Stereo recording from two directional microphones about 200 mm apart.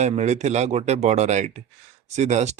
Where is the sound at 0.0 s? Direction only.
35° right (ahead or behind).